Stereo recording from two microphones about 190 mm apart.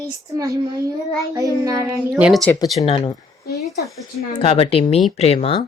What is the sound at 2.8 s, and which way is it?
A woman's voice, 30° left (ahead or behind).